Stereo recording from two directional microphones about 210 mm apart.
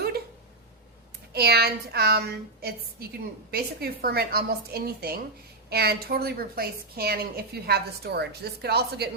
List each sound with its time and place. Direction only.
1.3 s a woman's voice: 50° right (ahead or behind)